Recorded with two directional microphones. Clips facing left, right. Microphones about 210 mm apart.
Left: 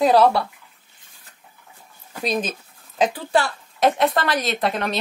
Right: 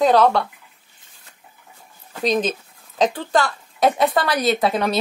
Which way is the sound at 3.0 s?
10° left (ahead or behind).